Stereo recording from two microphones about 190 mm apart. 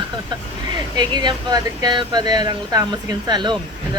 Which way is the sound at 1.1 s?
25° right (ahead or behind).